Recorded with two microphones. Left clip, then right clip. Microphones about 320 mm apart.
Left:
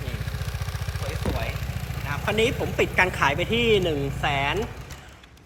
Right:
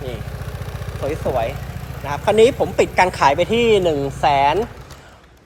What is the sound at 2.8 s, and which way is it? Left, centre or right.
Speech, centre.